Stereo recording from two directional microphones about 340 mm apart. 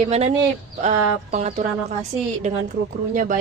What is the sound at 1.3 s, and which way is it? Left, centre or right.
A woman's voice, right.